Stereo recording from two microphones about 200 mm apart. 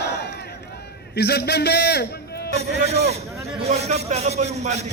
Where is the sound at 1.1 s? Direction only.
55° left (ahead or behind).